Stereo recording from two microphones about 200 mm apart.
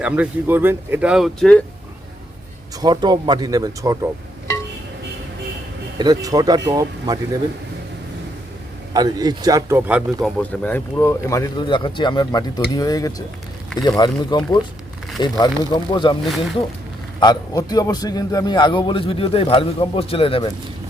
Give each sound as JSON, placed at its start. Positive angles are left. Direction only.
{"t": 0.0, "sound": "speech", "side_deg": -10}
{"t": 2.8, "sound": "speech", "side_deg": -20}
{"t": 6.0, "sound": "speech", "side_deg": -20}
{"t": 8.9, "sound": "a man's voice", "side_deg": -20}
{"t": 17.2, "sound": "a man's voice", "side_deg": 20}